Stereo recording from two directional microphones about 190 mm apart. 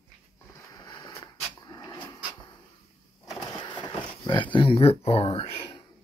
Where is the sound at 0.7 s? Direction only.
20° left (ahead or behind).